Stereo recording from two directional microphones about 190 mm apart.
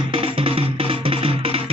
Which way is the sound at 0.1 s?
30° right (ahead or behind).